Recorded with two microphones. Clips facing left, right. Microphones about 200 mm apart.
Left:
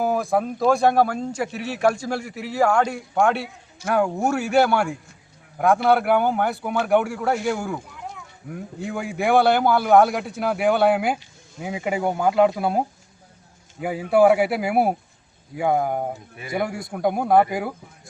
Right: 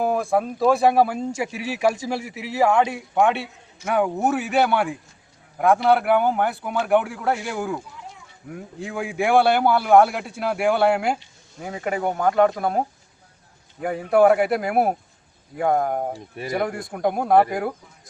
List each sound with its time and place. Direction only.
0.0 s speech: 5° left (ahead or behind)
8.0 s a sound: 55° left (ahead or behind)
8.4 s speech: centre (ahead or behind)
13.8 s speech: 5° left (ahead or behind)